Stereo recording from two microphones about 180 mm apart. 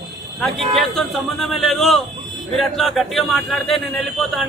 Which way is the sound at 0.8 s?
Centre (ahead or behind).